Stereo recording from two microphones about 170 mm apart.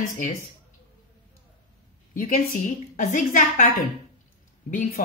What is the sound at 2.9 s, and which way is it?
Speech, 45° left (ahead or behind).